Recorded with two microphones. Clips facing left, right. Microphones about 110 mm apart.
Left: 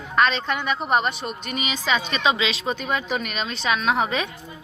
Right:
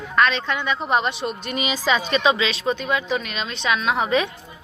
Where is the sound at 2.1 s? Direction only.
25° left (ahead or behind).